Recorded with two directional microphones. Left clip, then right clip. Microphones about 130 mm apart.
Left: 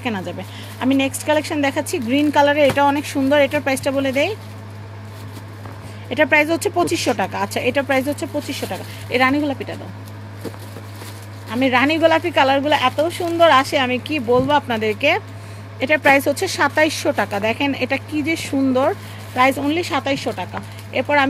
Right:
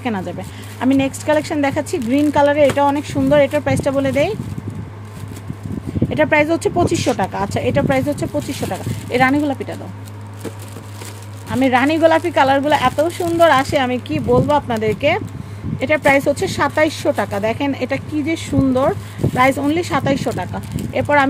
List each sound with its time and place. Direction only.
0.0 s speech: 45° right (ahead or behind)
6.0 s speech: 40° right (ahead or behind)
11.5 s speech: 50° right (ahead or behind); by 18.9 s 30° right (ahead or behind)
19.6 s speech: 50° right (ahead or behind)